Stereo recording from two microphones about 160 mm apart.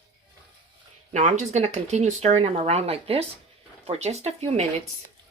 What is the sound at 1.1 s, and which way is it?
Speech, 45° right (ahead or behind).